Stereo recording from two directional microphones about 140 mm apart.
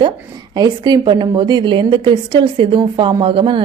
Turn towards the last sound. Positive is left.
turn(degrees=-35)  # may be behind; listen again after turning